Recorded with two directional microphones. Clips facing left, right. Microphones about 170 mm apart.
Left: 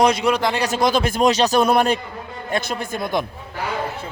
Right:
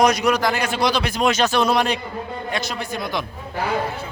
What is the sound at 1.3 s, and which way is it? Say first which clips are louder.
Speech: left 1 dB; 35° left (ahead or behind).